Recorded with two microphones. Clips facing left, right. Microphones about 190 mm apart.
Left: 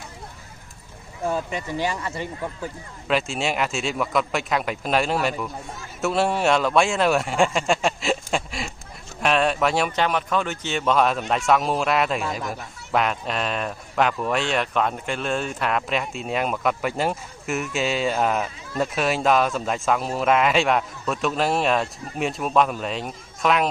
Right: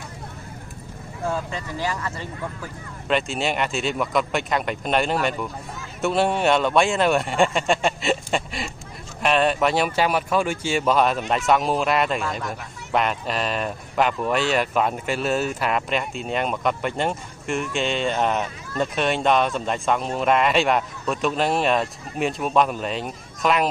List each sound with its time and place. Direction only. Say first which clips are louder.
1.3 s speech: left 4 dB; 20° left (ahead or behind)
3.1 s speech: right 1 dB; centre (ahead or behind)